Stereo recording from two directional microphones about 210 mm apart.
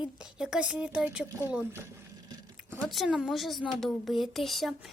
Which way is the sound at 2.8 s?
Centre (ahead or behind).